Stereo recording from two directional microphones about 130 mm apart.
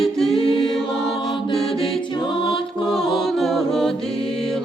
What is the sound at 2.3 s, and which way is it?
Music, 40° left (ahead or behind).